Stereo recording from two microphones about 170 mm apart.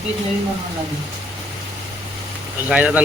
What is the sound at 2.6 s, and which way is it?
Speech, 5° right (ahead or behind).